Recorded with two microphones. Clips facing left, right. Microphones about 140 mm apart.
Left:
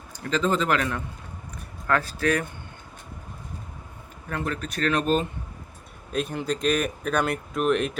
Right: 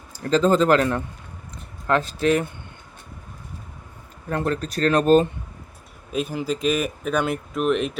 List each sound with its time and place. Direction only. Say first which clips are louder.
0.3 s speech: right 7 dB; 35° right (ahead or behind)
1.9 s speech: right 4 dB; 20° right (ahead or behind)
4.3 s speech: right 6 dB; 35° right (ahead or behind)
6.1 s speech: right 2 dB; 5° right (ahead or behind)